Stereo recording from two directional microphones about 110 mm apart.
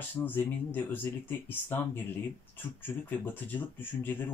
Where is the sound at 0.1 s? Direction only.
15° left (ahead or behind).